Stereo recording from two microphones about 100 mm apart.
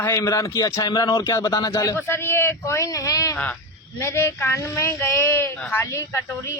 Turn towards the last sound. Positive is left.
turn(degrees=30)  # may be behind; listen again after turning